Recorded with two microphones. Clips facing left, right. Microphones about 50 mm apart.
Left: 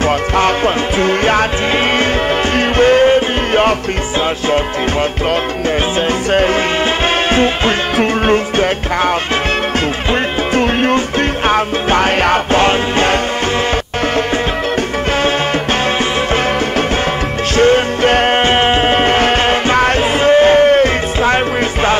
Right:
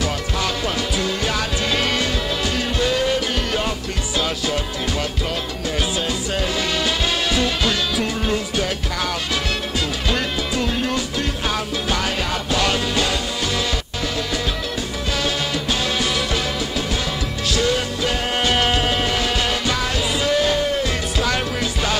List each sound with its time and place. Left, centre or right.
0.9 s music: left
2.5 s music: left
7.3 s music: left
10.5 s music: left
17.6 s music: left